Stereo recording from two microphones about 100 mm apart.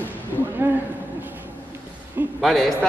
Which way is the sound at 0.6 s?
20° right (ahead or behind).